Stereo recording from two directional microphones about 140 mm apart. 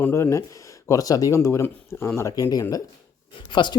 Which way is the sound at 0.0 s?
20° left (ahead or behind).